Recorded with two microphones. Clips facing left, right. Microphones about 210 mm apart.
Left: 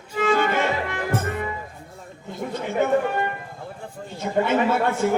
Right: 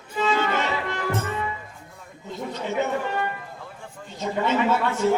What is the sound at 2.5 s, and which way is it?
Chatter, 50° left (ahead or behind).